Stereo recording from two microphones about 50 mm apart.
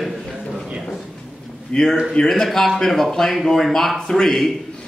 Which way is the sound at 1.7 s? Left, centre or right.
Left.